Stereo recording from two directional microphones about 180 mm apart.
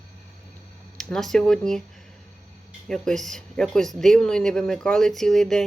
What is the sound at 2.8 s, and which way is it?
Speech, 5° left (ahead or behind).